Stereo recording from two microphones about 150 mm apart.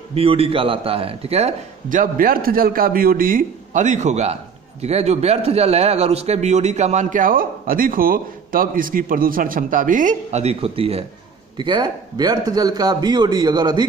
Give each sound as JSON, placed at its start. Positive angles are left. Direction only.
{"t": 0.1, "sound": "a man's voice", "side_deg": -40}
{"t": 1.9, "sound": "a man's voice", "side_deg": -65}